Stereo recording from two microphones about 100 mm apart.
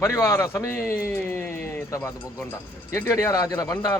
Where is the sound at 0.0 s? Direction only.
30° left (ahead or behind).